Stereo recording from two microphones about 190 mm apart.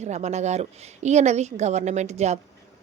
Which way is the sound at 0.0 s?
35° right (ahead or behind).